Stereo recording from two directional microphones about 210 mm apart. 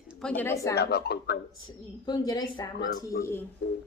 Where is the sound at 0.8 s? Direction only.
50° left (ahead or behind).